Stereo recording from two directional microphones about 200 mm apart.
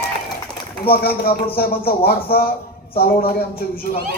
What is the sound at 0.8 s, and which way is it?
A man's voice, 50° left (ahead or behind).